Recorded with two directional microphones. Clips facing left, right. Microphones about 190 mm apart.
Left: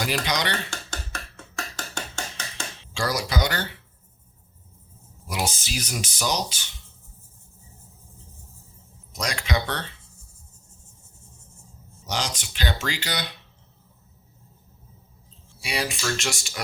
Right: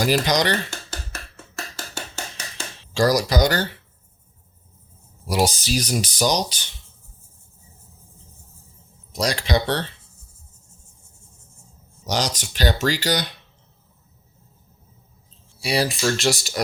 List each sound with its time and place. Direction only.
0.0 s speech: 40° right (ahead or behind)
0.7 s a sound: 5° right (ahead or behind)
2.9 s speech: 40° right (ahead or behind)
5.3 s speech: 35° right (ahead or behind)
9.1 s speech: 35° right (ahead or behind)
12.0 s speech: 40° right (ahead or behind)
15.6 s speech: 35° right (ahead or behind)